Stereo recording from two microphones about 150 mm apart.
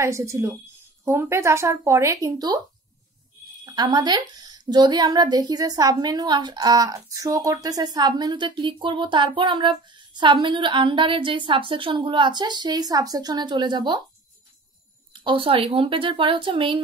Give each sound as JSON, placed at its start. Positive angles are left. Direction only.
{"t": 0.0, "sound": "a woman's voice", "side_deg": -20}
{"t": 3.6, "sound": "a woman's voice", "side_deg": -30}
{"t": 15.1, "sound": "a woman's voice", "side_deg": -35}